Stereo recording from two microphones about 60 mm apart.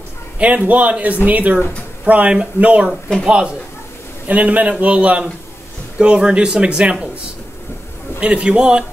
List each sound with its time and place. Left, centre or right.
0.7 s a man's voice: right
8.2 s speech: centre